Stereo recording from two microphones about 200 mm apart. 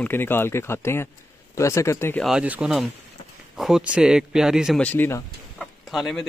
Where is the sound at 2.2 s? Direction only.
5° right (ahead or behind); by 5.7 s 10° left (ahead or behind).